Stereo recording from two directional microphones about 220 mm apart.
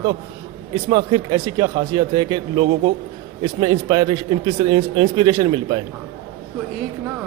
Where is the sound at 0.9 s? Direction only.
20° right (ahead or behind).